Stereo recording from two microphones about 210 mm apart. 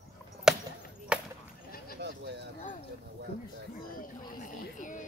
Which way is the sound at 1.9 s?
55° right (ahead or behind).